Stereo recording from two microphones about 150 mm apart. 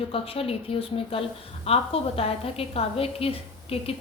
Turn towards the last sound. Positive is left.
turn(degrees=40)  # may be behind; listen again after turning